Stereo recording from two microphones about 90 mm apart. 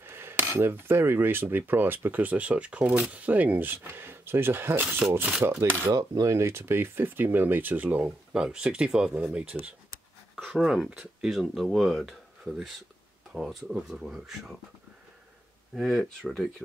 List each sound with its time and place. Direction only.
0.0 s cutlery: 25° right (ahead or behind)
5.4 s dishes: 30° right (ahead or behind)
5.9 s cutlery: 40° right (ahead or behind); by 9.8 s 15° right (ahead or behind)
10.3 s speech: centre (ahead or behind)
15.7 s speech: centre (ahead or behind)